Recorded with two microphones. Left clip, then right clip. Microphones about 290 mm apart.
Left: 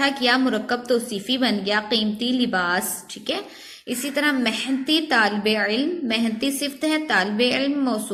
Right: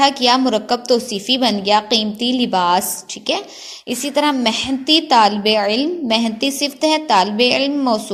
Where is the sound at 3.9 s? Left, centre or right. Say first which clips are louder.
Right 5 dB; right.